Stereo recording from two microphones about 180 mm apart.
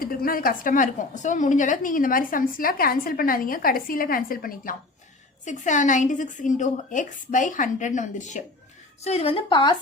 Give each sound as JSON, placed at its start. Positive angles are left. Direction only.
{"t": 0.0, "sound": "a woman's voice", "side_deg": 55}